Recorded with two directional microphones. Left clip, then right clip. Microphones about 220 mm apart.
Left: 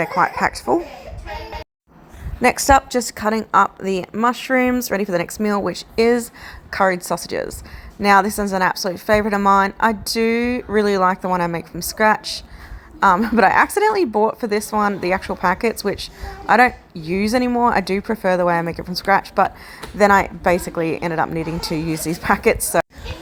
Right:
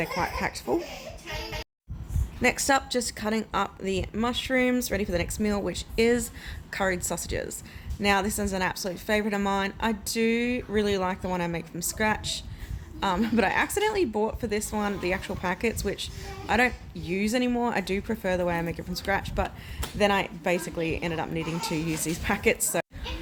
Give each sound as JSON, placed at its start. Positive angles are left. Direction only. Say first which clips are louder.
{"t": 0.0, "sound": "speech", "louder": "left 11 dB", "side_deg": 10}
{"t": 2.4, "sound": "a woman's voice", "louder": "left 10 dB", "side_deg": 25}
{"t": 8.0, "sound": "a woman's voice", "louder": "left 11 dB", "side_deg": 20}